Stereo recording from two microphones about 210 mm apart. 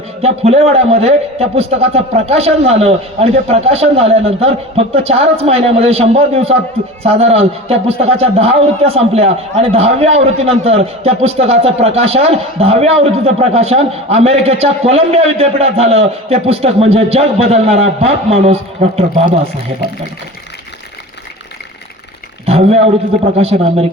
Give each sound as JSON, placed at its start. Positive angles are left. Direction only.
{"t": 0.2, "sound": "a man's voice", "side_deg": -30}
{"t": 22.4, "sound": "a sound", "side_deg": -30}
{"t": 23.4, "sound": "a man's voice", "side_deg": -30}